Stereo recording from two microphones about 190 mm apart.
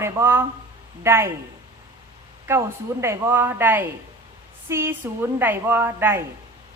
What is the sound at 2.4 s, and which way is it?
A woman's voice, 15° right (ahead or behind).